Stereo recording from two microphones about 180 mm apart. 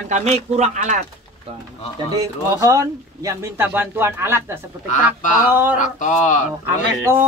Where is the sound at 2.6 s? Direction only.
15° right (ahead or behind).